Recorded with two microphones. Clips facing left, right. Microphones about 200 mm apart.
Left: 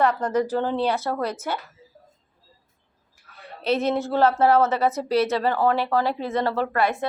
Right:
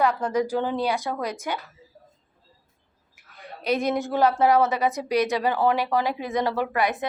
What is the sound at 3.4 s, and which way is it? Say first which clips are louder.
Speech: left 1 dB; 15° right (ahead or behind).